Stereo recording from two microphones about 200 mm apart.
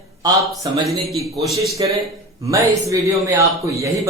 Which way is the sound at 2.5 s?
15° right (ahead or behind).